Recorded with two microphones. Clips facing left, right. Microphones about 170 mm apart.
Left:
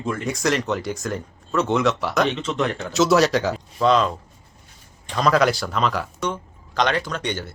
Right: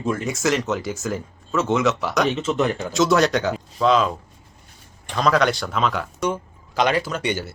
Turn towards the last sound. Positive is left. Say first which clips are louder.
# right 2 dB
turn(degrees=-5)  # may be behind; listen again after turning